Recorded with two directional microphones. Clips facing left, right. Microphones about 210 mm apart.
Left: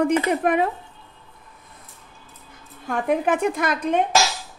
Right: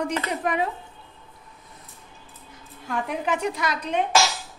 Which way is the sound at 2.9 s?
50° left (ahead or behind).